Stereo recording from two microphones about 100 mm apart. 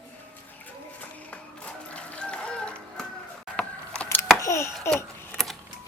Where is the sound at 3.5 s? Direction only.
10° left (ahead or behind).